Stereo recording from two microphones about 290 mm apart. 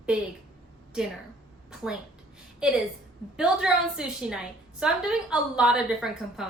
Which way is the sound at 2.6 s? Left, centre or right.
Centre.